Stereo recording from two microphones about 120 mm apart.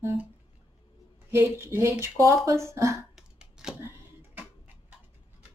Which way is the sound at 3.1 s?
5° right (ahead or behind).